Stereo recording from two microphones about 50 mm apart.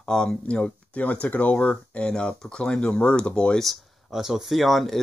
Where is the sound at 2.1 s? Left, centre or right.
Centre.